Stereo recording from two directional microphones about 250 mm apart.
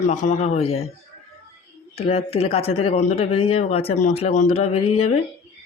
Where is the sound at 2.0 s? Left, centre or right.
Left.